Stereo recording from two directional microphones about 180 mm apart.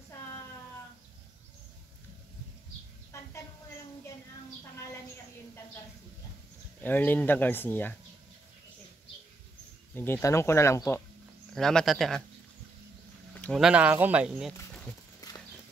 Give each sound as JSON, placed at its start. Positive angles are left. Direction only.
{"t": 6.8, "sound": "speech", "side_deg": 10}
{"t": 9.9, "sound": "speech", "side_deg": 10}
{"t": 11.5, "sound": "speech", "side_deg": 0}
{"t": 13.3, "sound": "a sound", "side_deg": 10}
{"t": 13.6, "sound": "speech", "side_deg": -5}
{"t": 15.2, "sound": "clip-clop", "side_deg": 20}